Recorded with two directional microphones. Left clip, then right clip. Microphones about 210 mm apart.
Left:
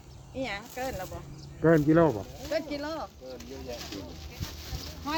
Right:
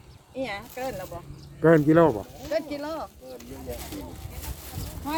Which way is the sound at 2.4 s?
15° right (ahead or behind).